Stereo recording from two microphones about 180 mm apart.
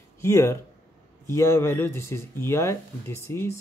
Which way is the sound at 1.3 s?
15° left (ahead or behind).